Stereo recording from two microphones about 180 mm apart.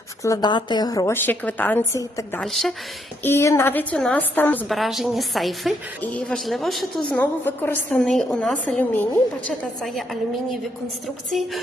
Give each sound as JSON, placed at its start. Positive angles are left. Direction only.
{"t": 0.2, "sound": "a woman's voice", "side_deg": 20}
{"t": 2.4, "sound": "a woman's voice", "side_deg": 0}
{"t": 3.2, "sound": "a woman's voice", "side_deg": 15}
{"t": 4.7, "sound": "a woman's voice", "side_deg": 0}
{"t": 7.2, "sound": "a woman's voice", "side_deg": 10}